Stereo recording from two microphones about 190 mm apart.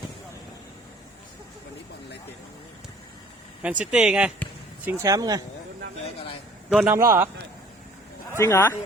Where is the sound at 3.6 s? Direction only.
5° right (ahead or behind).